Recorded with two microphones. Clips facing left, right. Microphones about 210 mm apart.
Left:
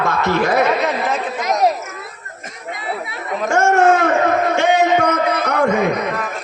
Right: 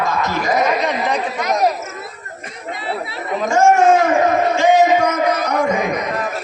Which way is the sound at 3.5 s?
65° left (ahead or behind).